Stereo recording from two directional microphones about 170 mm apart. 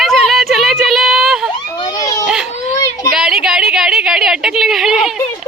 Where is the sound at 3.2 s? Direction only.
Centre (ahead or behind).